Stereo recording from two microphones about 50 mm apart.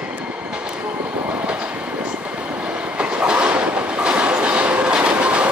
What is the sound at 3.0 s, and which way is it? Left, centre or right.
Train, right.